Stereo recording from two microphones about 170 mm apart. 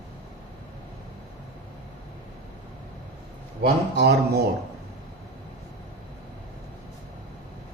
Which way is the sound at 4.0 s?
70° right (ahead or behind).